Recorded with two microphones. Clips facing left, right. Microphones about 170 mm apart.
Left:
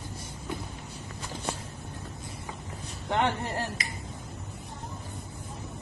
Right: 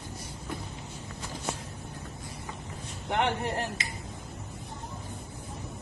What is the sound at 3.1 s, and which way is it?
Speech, 20° right (ahead or behind).